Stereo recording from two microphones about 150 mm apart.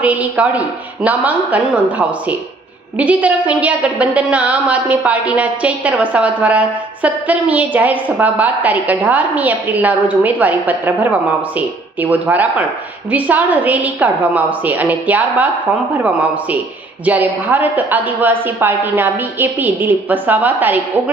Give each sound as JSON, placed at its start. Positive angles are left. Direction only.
{"t": 0.0, "sound": "a woman's voice", "side_deg": -10}